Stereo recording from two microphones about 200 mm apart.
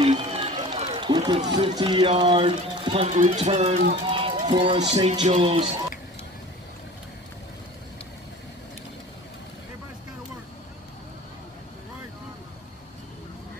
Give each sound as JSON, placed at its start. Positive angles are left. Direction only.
{"t": 0.0, "sound": "run", "side_deg": -30}
{"t": 1.4, "sound": "speech", "side_deg": -25}